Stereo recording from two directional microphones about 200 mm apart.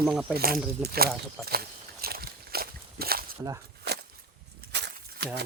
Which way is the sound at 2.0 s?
50° right (ahead or behind).